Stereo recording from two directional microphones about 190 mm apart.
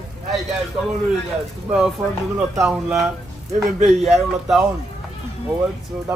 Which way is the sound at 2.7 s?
5° right (ahead or behind).